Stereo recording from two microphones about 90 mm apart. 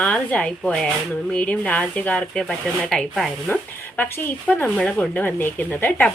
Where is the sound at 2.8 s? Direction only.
5° left (ahead or behind).